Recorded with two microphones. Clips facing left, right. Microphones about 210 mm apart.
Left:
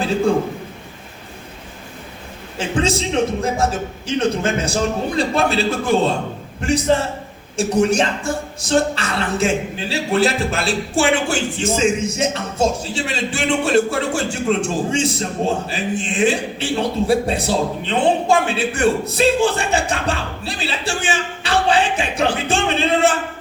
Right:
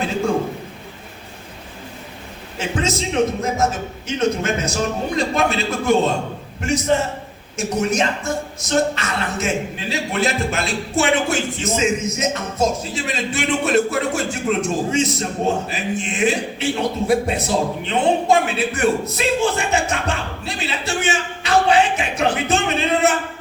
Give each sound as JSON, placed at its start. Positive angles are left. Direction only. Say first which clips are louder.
{"t": 2.6, "sound": "speech", "louder": "left 3 dB", "side_deg": 30}